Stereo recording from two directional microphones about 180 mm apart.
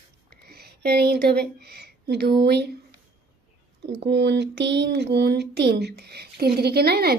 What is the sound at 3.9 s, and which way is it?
Speech, 70° right (ahead or behind).